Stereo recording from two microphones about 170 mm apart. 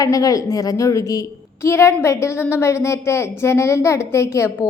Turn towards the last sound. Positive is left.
turn(degrees=15)  # may be behind; listen again after turning